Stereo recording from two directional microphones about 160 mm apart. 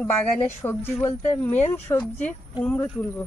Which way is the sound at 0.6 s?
15° left (ahead or behind).